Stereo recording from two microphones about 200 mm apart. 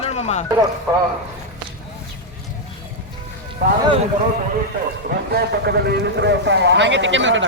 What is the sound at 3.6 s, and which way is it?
Speech, 50° right (ahead or behind).